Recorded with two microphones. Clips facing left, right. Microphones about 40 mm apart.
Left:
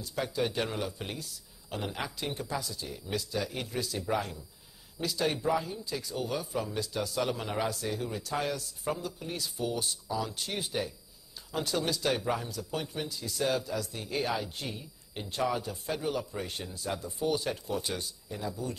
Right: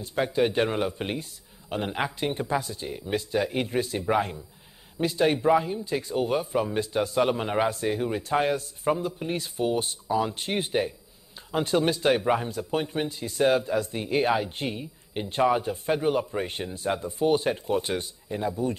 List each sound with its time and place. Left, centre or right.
0.0 s speech: right